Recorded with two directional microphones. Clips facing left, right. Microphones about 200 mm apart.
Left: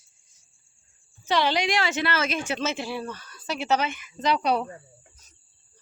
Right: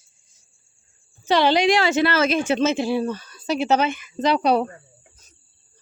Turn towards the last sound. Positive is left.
turn(degrees=-35)  # may be behind; listen again after turning